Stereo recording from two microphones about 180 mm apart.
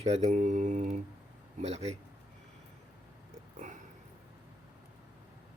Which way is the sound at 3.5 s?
45° right (ahead or behind).